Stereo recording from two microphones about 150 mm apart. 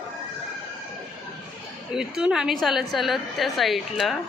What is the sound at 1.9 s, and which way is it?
A woman's voice, 5° right (ahead or behind).